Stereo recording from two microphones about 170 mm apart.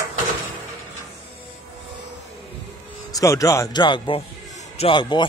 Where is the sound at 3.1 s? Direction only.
20° left (ahead or behind).